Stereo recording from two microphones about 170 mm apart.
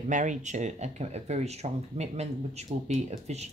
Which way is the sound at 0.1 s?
45° right (ahead or behind).